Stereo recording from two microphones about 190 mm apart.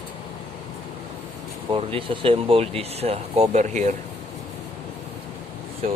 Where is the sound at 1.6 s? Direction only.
25° right (ahead or behind).